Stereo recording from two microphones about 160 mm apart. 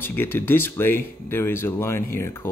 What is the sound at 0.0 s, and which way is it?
Speech, 15° left (ahead or behind).